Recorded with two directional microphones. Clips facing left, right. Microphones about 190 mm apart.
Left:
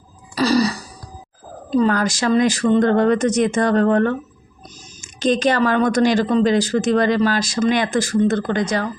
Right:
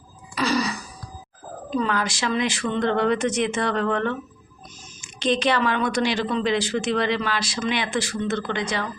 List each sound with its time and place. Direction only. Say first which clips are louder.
0.3 s throat clearing: left 7 dB; 35° left (ahead or behind)
1.7 s speech: left 7 dB; 40° left (ahead or behind)